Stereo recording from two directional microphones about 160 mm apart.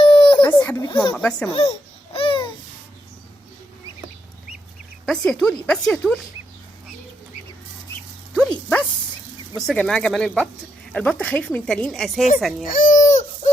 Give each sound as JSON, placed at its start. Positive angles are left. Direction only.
{"t": 0.0, "sound": "a sound", "side_deg": 35}
{"t": 0.4, "sound": "a sound", "side_deg": 10}
{"t": 1.1, "sound": "speech", "side_deg": 5}
{"t": 1.5, "sound": "a child's voice", "side_deg": 35}
{"t": 2.1, "sound": "babbling", "side_deg": 35}
{"t": 5.0, "sound": "speech", "side_deg": 5}
{"t": 8.4, "sound": "dog", "side_deg": 5}
{"t": 9.6, "sound": "speech", "side_deg": 0}
{"t": 12.6, "sound": "baby cry", "side_deg": 55}